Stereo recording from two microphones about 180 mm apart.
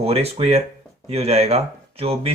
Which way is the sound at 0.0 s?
35° right (ahead or behind).